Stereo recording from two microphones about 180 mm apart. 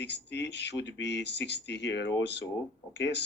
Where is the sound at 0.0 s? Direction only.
70° left (ahead or behind).